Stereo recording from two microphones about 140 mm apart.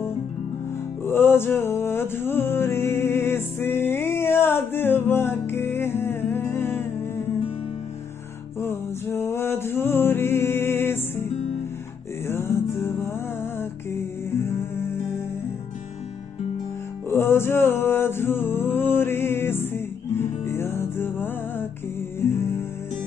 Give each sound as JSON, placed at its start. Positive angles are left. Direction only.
{"t": 1.0, "sound": "music", "side_deg": 15}
{"t": 8.5, "sound": "music", "side_deg": 15}
{"t": 12.3, "sound": "music", "side_deg": 20}
{"t": 17.1, "sound": "music", "side_deg": 15}